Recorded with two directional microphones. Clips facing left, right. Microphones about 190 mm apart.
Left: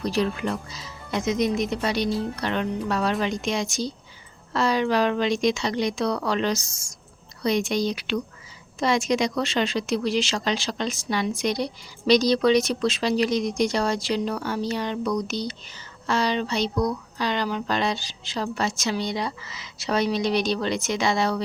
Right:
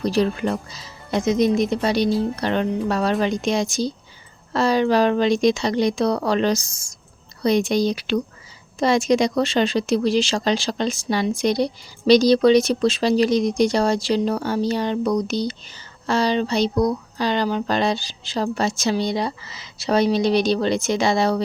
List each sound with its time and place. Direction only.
0.0 s speech: 35° right (ahead or behind)